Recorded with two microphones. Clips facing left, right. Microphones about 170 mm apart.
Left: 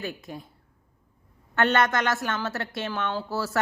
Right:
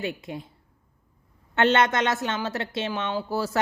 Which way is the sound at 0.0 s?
20° right (ahead or behind).